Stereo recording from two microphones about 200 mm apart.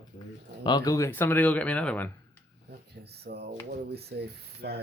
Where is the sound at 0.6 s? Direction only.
20° left (ahead or behind).